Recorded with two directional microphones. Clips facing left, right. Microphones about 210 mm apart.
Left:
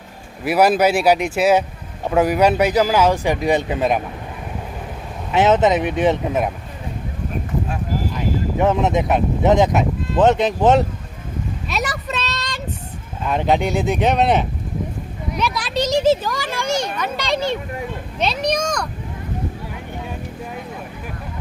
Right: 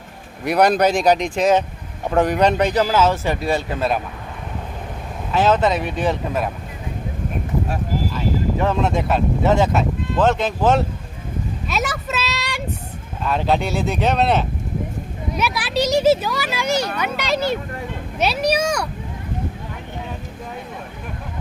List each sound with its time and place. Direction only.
0.4 s speech: 5° left (ahead or behind)
5.3 s speech: 20° left (ahead or behind)
8.1 s speech: 20° left (ahead or behind)
11.7 s a sound: centre (ahead or behind)
13.2 s speech: 15° left (ahead or behind)
15.4 s a child's voice: 5° right (ahead or behind)